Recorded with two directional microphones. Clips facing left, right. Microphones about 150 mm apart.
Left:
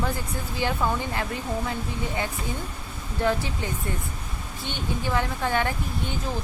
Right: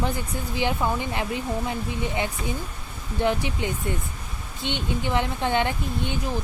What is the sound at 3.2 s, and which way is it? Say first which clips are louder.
Speech: right 1 dB; 20° right (ahead or behind).